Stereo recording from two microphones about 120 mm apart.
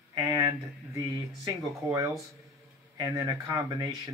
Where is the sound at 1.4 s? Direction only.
25° right (ahead or behind).